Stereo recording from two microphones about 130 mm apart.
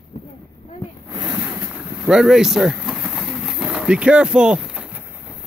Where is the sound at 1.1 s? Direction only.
30° right (ahead or behind).